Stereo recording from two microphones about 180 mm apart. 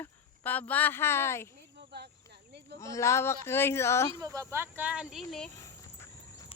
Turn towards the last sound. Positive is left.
turn(degrees=-5)  # may be behind; listen again after turning